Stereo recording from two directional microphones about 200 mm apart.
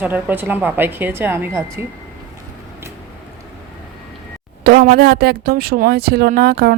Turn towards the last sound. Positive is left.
turn(degrees=-50)  # may be behind; listen again after turning